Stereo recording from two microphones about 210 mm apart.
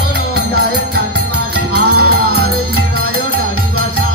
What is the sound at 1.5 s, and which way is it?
Music, 50° right (ahead or behind).